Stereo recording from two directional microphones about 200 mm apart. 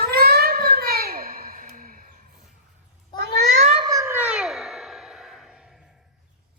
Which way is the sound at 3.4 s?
35° right (ahead or behind).